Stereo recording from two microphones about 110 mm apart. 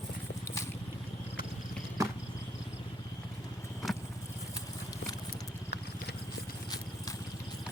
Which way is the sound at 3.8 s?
Centre (ahead or behind).